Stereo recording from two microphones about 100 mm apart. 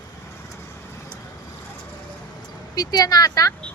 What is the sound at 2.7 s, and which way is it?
Speech, 40° left (ahead or behind).